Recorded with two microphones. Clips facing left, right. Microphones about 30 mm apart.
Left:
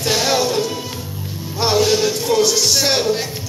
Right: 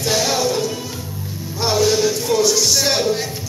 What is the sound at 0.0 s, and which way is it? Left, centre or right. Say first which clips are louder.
Music: left 1 dB; left.